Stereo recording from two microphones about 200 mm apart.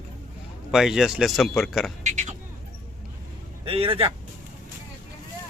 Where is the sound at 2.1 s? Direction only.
35° right (ahead or behind).